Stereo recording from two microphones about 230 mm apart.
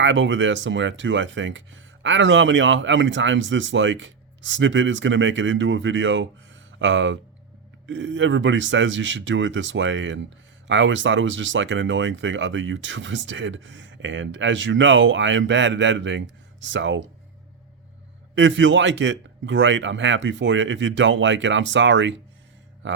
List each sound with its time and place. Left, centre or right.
0.0 s speech: right
18.3 s speech: right